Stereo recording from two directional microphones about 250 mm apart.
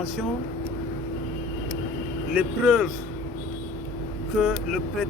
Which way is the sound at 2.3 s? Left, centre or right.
Centre.